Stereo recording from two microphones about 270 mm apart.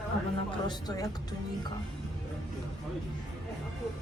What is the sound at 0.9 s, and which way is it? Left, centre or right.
Speech, centre.